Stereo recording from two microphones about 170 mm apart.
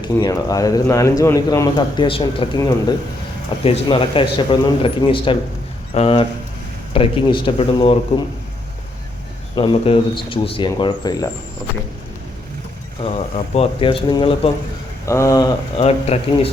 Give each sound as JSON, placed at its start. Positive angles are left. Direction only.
{"t": 0.0, "sound": "speech", "side_deg": 20}
{"t": 3.6, "sound": "speech", "side_deg": 30}
{"t": 9.6, "sound": "speech", "side_deg": 30}
{"t": 13.0, "sound": "speech", "side_deg": 35}
{"t": 15.0, "sound": "speech", "side_deg": 15}
{"t": 15.8, "sound": "speech", "side_deg": 35}